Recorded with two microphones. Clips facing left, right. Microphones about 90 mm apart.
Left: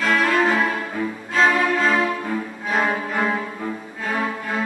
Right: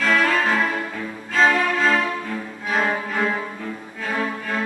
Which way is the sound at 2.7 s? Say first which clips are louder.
Left 1 dB; 10° left (ahead or behind).